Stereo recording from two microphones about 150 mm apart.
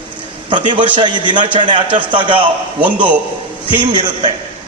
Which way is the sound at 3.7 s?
30° right (ahead or behind).